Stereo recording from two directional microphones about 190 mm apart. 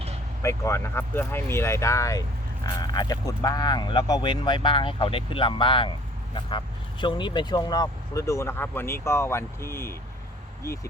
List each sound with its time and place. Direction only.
0.4 s speech: 15° left (ahead or behind)
7.0 s speech: 25° left (ahead or behind)